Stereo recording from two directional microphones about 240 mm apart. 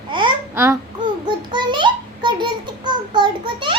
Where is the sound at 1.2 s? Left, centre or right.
Centre.